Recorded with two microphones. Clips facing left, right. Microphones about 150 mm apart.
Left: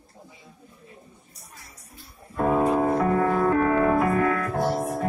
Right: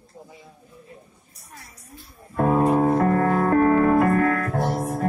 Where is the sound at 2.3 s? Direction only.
50° right (ahead or behind).